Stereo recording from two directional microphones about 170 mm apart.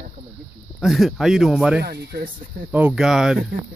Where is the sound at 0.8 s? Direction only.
Centre (ahead or behind).